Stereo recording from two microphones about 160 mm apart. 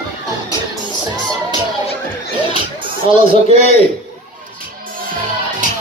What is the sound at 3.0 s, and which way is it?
Speech, 35° right (ahead or behind).